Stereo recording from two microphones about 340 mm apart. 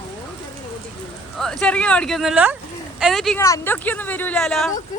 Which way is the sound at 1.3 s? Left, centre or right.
Centre.